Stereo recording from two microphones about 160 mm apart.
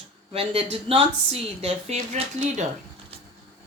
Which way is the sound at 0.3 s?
35° right (ahead or behind).